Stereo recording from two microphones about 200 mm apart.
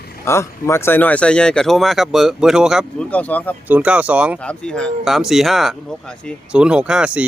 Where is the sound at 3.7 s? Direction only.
5° right (ahead or behind).